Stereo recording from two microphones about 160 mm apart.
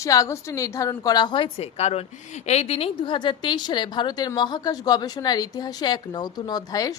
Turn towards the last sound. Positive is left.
turn(degrees=25)  # may be behind; listen again after turning